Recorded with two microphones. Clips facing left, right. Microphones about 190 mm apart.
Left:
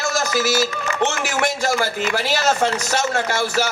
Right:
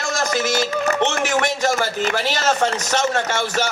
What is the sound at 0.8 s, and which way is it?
Speech, 40° right (ahead or behind).